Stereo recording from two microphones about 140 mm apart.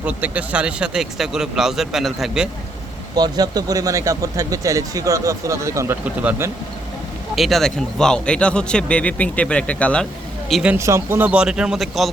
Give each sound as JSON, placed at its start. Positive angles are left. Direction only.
{"t": 0.0, "sound": "speech", "side_deg": -10}
{"t": 3.2, "sound": "speech", "side_deg": -30}
{"t": 7.3, "sound": "a man's voice", "side_deg": 0}
{"t": 10.5, "sound": "speech", "side_deg": -10}
{"t": 10.8, "sound": "speech", "side_deg": -20}